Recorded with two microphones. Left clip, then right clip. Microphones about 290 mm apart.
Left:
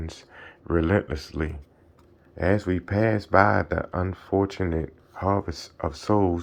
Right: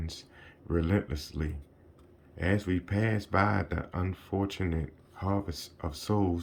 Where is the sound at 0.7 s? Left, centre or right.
Centre.